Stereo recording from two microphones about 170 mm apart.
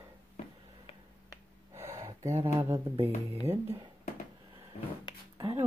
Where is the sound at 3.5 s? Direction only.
15° right (ahead or behind).